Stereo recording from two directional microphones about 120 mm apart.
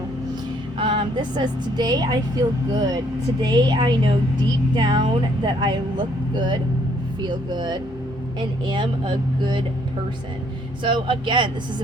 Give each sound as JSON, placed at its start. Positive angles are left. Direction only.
{"t": 0.8, "sound": "speech", "side_deg": -45}
{"t": 3.4, "sound": "speech", "side_deg": -40}
{"t": 10.8, "sound": "speech", "side_deg": -45}